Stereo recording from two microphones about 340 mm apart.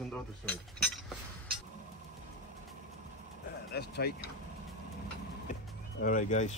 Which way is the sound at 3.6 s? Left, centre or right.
Left.